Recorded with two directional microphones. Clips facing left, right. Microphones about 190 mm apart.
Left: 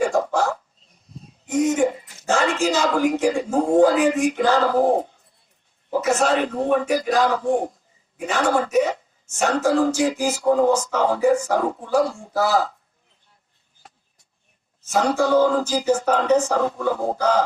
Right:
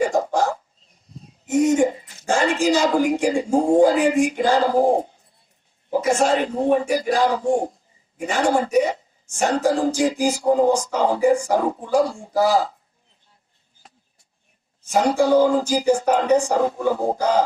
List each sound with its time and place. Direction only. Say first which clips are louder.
0.0 s a sound: even; 15° right (ahead or behind)
1.5 s speech: right 2 dB; 10° right (ahead or behind)
14.8 s speech: right 2 dB; 15° right (ahead or behind)